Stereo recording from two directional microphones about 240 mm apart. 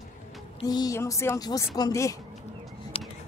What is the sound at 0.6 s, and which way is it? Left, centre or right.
A woman's voice, centre.